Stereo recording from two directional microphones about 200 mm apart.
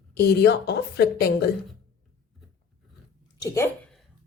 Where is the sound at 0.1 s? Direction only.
55° left (ahead or behind).